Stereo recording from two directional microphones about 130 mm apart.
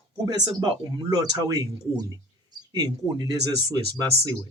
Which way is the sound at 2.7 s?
30° right (ahead or behind).